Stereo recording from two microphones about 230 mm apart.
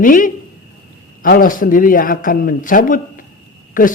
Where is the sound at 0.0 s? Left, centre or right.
Left.